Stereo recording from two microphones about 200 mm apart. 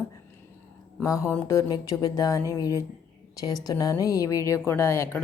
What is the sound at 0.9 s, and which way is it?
Speech, 15° left (ahead or behind).